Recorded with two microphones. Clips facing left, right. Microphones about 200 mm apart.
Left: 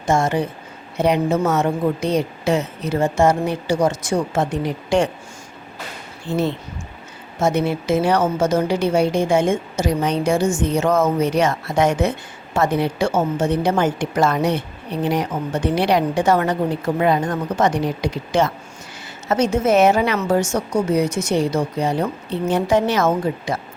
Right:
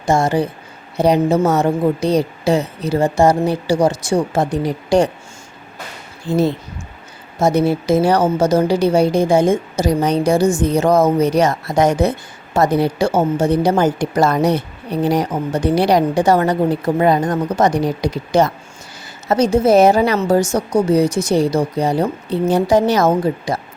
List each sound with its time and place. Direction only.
0.0 s a woman's voice: 35° right (ahead or behind)
6.2 s a woman's voice: 40° right (ahead or behind)